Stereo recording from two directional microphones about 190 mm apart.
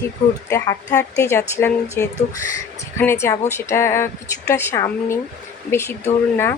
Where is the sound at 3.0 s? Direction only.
15° left (ahead or behind).